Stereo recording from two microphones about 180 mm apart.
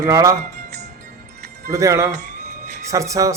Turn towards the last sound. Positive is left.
turn(degrees=-15)  # may be behind; listen again after turning